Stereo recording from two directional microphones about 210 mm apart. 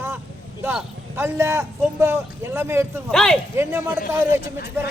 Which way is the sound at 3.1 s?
Centre (ahead or behind).